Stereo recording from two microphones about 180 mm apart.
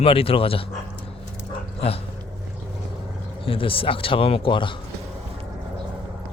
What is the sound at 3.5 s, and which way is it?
Speech, 30° left (ahead or behind).